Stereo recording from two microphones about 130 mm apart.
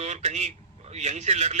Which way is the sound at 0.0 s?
60° right (ahead or behind).